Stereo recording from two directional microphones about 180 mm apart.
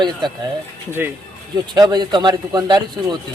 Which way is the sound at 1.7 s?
20° right (ahead or behind).